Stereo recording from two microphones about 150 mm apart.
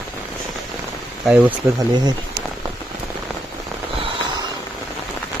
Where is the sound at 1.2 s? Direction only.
5° right (ahead or behind).